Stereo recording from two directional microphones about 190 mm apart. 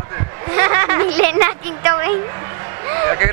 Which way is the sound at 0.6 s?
20° right (ahead or behind).